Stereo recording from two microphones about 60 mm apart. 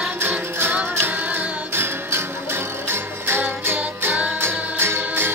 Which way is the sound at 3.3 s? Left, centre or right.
Right.